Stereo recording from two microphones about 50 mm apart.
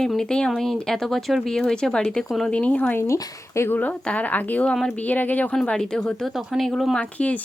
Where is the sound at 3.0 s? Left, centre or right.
Left.